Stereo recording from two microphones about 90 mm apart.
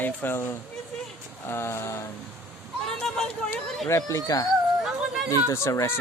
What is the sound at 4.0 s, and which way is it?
Speech, 40° left (ahead or behind).